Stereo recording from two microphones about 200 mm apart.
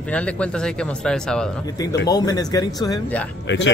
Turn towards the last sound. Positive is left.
turn(degrees=65)  # may be behind; listen again after turning